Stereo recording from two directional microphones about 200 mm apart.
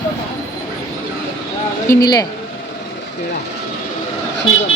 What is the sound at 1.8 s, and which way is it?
Speech, 20° left (ahead or behind).